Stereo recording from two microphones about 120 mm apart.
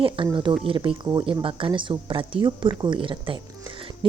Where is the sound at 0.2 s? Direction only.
45° right (ahead or behind).